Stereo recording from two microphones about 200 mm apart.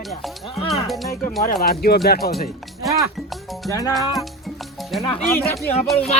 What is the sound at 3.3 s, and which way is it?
Music, centre (ahead or behind).